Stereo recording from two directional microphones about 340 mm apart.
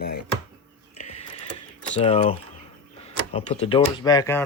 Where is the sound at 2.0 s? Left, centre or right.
Centre.